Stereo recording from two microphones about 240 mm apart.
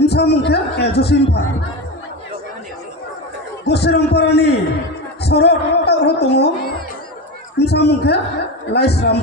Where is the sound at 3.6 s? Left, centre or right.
Left.